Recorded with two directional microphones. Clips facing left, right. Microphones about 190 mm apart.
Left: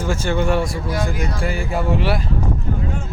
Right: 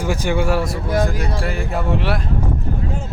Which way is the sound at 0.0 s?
15° right (ahead or behind).